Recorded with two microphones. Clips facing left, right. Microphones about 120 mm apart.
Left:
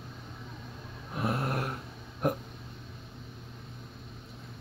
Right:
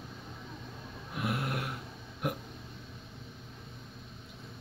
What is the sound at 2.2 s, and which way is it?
Hiccup, 40° left (ahead or behind).